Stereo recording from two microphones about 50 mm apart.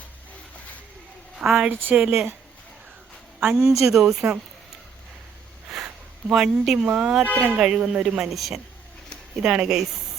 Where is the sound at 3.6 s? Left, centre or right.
Right.